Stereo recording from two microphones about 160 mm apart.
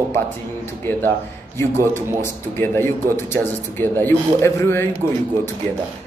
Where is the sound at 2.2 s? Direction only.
15° left (ahead or behind).